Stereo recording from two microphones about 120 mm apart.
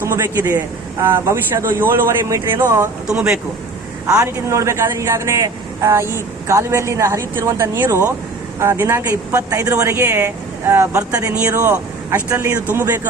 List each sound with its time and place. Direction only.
0.0 s a man's voice: 20° right (ahead or behind)
3.1 s speech: 5° right (ahead or behind)
4.0 s a man's voice: 25° right (ahead or behind)